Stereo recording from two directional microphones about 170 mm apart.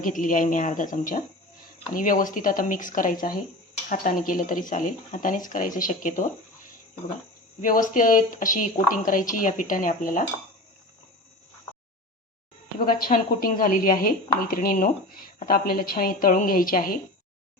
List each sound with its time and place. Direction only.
0.0 s a woman's voice: 50° left (ahead or behind)
7.6 s a woman's voice: 50° left (ahead or behind)
12.8 s speech: 55° left (ahead or behind)